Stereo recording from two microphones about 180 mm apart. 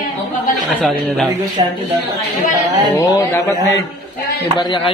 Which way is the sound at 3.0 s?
15° left (ahead or behind).